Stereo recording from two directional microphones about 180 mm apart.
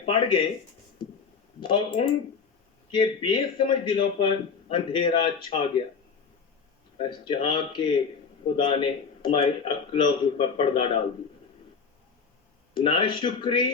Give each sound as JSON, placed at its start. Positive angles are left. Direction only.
{"t": 0.0, "sound": "speech", "side_deg": 30}
{"t": 1.6, "sound": "a man's voice", "side_deg": 25}
{"t": 2.9, "sound": "a man's voice", "side_deg": 25}
{"t": 7.0, "sound": "a man's voice", "side_deg": 25}
{"t": 12.7, "sound": "a man's voice", "side_deg": 25}